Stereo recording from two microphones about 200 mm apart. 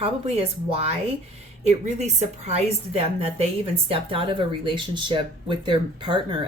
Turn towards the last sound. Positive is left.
turn(degrees=-25)  # may be behind; listen again after turning